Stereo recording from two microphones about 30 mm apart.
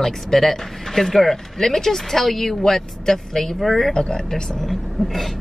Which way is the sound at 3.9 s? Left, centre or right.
Left.